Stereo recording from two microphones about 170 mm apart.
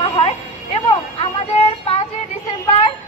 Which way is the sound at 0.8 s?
35° left (ahead or behind).